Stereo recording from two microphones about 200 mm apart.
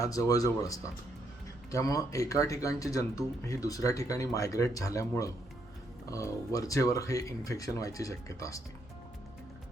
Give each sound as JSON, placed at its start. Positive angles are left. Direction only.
{"t": 0.0, "sound": "speech", "side_deg": 15}